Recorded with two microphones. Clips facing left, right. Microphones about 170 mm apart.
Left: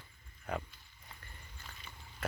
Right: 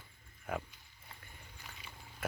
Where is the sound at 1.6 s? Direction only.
15° right (ahead or behind).